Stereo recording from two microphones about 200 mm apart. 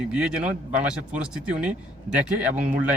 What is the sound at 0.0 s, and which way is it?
Speech, 5° right (ahead or behind).